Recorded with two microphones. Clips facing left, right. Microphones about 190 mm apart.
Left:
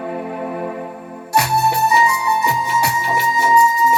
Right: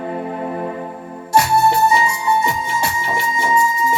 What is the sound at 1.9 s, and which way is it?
Music, 25° right (ahead or behind).